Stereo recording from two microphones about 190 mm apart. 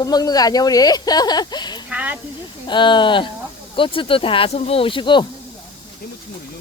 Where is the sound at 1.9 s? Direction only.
5° right (ahead or behind).